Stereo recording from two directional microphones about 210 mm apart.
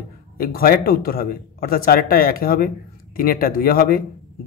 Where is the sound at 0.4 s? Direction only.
45° left (ahead or behind).